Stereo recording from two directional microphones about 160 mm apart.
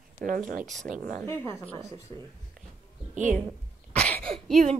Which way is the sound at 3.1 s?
50° right (ahead or behind).